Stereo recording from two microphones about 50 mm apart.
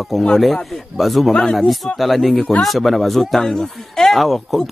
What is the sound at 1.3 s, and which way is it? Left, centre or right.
Speech, centre.